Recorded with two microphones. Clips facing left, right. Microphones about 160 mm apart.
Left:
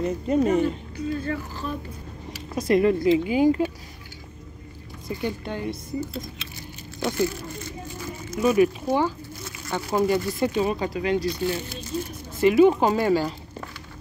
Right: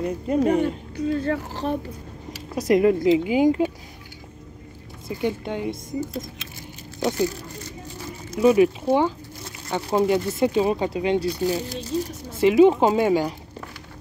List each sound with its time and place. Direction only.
0.0 s speech: 5° right (ahead or behind)
0.5 s speech: 60° right (ahead or behind)
2.5 s speech: 15° right (ahead or behind)
5.2 s speech: 20° right (ahead or behind)
7.2 s speech: 40° right (ahead or behind)
8.3 s speech: 25° right (ahead or behind)
11.4 s speech: 40° right (ahead or behind)
11.9 s a sound: 90° right
12.4 s speech: 20° right (ahead or behind)